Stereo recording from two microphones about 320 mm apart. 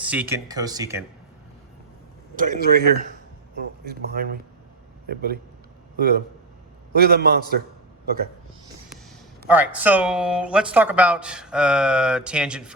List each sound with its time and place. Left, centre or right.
0.0 s speech: centre
2.3 s a man's voice: right
9.5 s speech: centre